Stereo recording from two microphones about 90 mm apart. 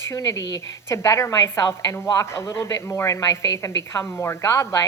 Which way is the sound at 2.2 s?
30° left (ahead or behind).